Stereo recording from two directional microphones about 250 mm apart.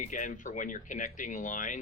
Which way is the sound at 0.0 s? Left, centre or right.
Left.